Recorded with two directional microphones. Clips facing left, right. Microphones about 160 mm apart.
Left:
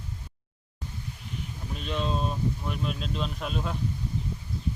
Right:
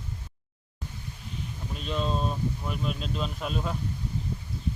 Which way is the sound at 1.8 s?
Centre (ahead or behind).